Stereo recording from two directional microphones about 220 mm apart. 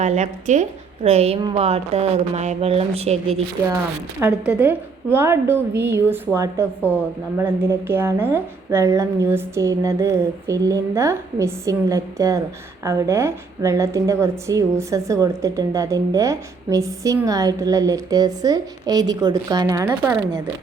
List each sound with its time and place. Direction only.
0.0 s a woman's voice: 30° right (ahead or behind)
4.2 s a woman's voice: 5° right (ahead or behind)